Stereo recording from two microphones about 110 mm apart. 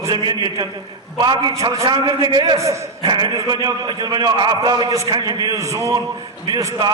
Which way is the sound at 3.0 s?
40° right (ahead or behind).